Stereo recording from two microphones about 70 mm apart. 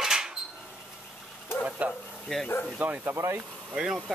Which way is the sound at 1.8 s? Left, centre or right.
Right.